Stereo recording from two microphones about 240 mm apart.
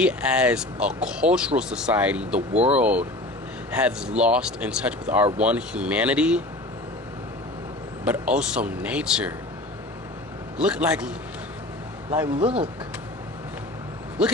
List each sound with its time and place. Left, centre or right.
0.0 s speech: centre
2.5 s speech: right
2.7 s speech: centre
8.0 s speech: centre
10.6 s speech: centre
12.4 s speech: right